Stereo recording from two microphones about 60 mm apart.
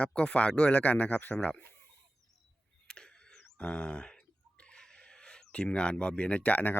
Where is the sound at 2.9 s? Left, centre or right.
Centre.